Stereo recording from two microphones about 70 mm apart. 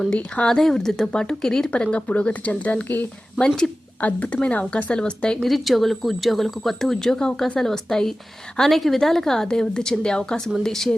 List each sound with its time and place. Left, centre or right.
0.1 s speech: centre
3.4 s speech: centre
4.0 s speech: left
5.5 s speech: centre